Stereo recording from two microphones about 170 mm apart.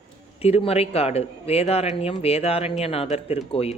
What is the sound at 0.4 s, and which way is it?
Speech, 35° left (ahead or behind).